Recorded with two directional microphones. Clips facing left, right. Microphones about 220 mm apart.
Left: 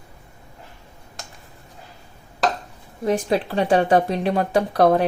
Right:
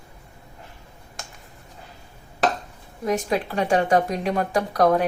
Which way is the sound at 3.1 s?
30° left (ahead or behind).